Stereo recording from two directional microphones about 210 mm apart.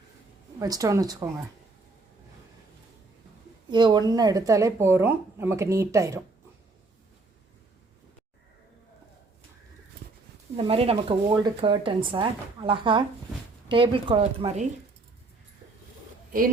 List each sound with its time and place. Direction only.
0.6 s a woman's voice: 15° right (ahead or behind)
3.7 s a woman's voice: 20° right (ahead or behind)
10.6 s speech: 25° right (ahead or behind)